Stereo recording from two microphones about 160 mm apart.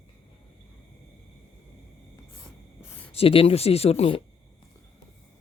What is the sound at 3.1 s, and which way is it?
Speech, 35° left (ahead or behind).